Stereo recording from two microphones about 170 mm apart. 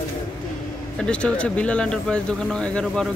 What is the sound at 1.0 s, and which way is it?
Speech, 5° left (ahead or behind).